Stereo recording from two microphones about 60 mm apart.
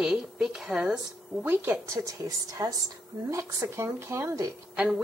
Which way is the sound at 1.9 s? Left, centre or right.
Right.